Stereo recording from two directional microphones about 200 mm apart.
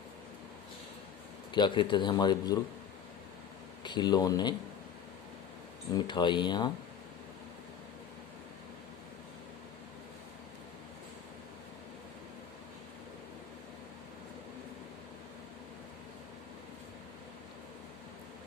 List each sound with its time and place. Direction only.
1.5 s speech: 25° left (ahead or behind)
3.8 s speech: 20° left (ahead or behind)
5.9 s speech: 20° left (ahead or behind)